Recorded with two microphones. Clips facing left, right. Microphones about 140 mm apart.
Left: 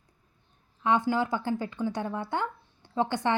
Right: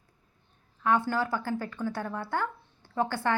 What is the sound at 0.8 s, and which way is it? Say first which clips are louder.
A woman's voice: left 1 dB; 15° left (ahead or behind).